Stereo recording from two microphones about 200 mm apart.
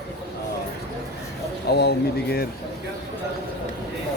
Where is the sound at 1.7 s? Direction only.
55° left (ahead or behind).